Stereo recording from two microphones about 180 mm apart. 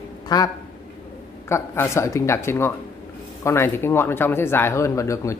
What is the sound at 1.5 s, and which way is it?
Speech, 15° left (ahead or behind).